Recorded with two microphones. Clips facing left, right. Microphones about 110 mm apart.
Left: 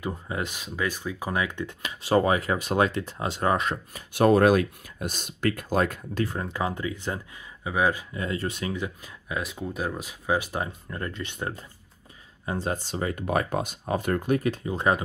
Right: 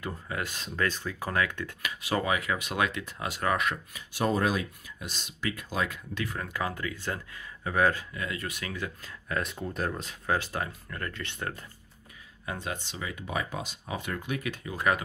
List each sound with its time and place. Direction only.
0.0 s speech: 20° left (ahead or behind)
4.1 s speech: 60° left (ahead or behind)
6.2 s speech: 25° left (ahead or behind)
8.2 s speech: 30° left (ahead or behind)
9.4 s speech: 5° left (ahead or behind); by 11.6 s 20° left (ahead or behind)
12.4 s speech: 35° left (ahead or behind)